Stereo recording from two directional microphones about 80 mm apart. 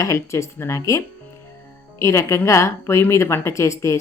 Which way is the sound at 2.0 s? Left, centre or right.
Left.